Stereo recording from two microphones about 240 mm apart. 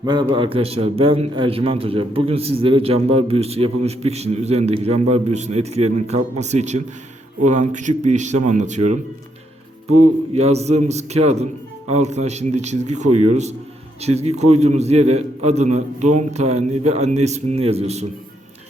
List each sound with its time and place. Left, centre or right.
0.0 s a man's voice: centre
10.3 s a man's voice: right